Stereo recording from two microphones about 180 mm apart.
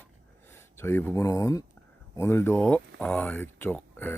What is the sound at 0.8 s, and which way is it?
Speech, 15° left (ahead or behind).